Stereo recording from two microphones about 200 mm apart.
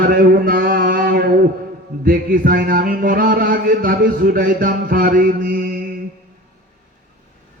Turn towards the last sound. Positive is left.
turn(degrees=-45)  # may be behind; listen again after turning